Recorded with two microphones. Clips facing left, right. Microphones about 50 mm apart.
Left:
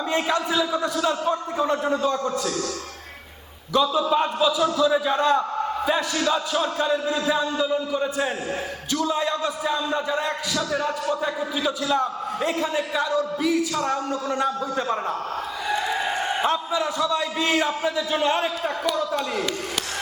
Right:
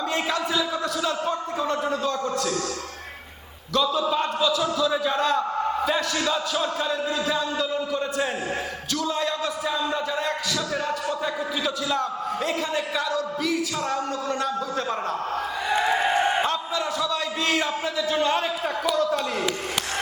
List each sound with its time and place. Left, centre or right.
0.1 s a man's voice: centre
3.7 s a man's voice: centre
15.7 s crowd: right
16.4 s a man's voice: centre